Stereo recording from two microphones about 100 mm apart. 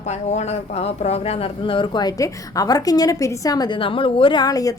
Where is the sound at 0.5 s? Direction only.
90° left; by 3.8 s 40° left (ahead or behind).